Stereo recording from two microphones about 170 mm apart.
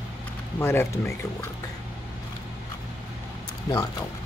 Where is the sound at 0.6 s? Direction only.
15° left (ahead or behind).